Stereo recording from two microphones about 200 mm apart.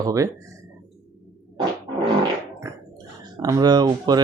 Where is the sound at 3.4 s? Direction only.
20° right (ahead or behind).